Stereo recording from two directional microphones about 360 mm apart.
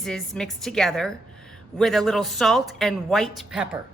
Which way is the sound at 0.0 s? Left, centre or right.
Centre.